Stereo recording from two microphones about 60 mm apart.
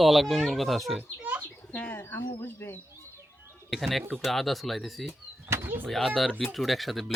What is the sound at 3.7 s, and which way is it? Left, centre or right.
Speech, centre.